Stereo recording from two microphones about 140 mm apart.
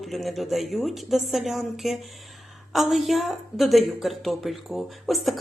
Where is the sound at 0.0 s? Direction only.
Centre (ahead or behind).